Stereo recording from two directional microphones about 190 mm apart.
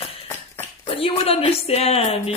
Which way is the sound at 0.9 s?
30° left (ahead or behind).